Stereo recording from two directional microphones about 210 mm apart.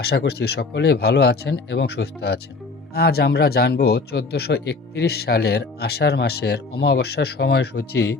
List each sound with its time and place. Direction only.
0.0 s a man's voice: 50° left (ahead or behind)